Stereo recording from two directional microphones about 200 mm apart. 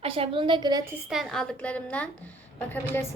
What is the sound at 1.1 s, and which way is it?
A woman's voice, centre (ahead or behind).